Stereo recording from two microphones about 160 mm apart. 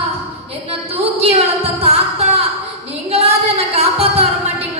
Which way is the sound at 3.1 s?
40° right (ahead or behind).